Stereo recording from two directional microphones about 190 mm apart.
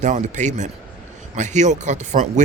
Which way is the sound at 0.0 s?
40° right (ahead or behind).